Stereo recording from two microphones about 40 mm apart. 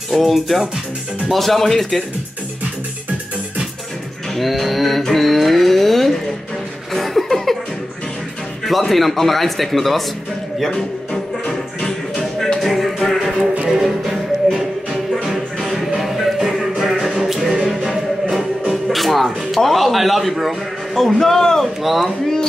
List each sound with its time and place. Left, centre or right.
0.1 s speech: centre
4.4 s speech: centre
6.9 s chuckle: centre
8.6 s speech: centre
11.4 s music: centre
12.5 s music: centre
13.7 s music: centre
18.7 s speech: centre
21.8 s speech: centre